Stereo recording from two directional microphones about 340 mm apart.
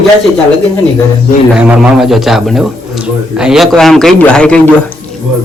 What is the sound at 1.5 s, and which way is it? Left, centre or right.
A man's voice, centre.